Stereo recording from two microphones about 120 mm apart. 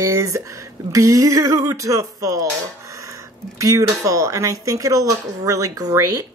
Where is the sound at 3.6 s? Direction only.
25° right (ahead or behind).